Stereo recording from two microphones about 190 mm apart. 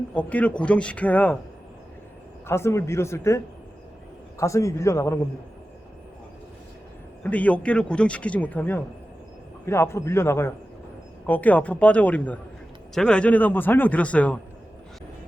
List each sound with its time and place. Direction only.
0.1 s a man's voice: 10° left (ahead or behind)
2.5 s a man's voice: 15° left (ahead or behind)
7.2 s a man's voice: 10° left (ahead or behind)